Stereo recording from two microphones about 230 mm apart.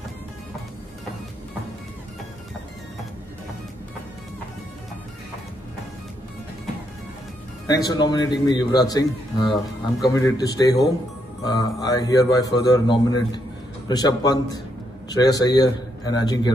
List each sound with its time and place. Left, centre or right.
7.6 s a man's voice: centre